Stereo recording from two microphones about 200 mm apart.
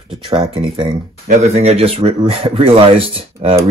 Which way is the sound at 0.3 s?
25° right (ahead or behind).